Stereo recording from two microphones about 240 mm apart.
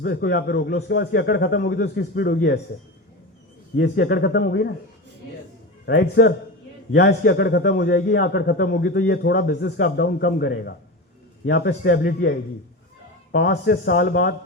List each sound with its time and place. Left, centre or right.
0.0 s a man's voice: left
3.8 s a man's voice: left
5.8 s a man's voice: left